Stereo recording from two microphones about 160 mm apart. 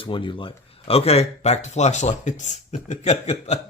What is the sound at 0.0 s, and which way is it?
Speech, 30° left (ahead or behind).